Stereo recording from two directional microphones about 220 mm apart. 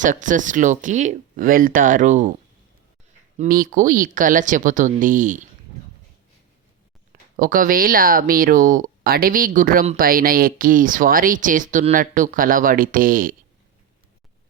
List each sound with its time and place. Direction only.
0.0 s speech: 35° right (ahead or behind)
3.3 s speech: 35° right (ahead or behind)
7.1 s speech: 40° right (ahead or behind)